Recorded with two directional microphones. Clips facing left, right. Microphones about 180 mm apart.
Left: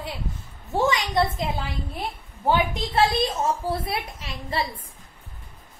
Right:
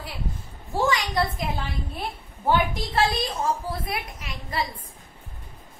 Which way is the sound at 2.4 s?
20° left (ahead or behind).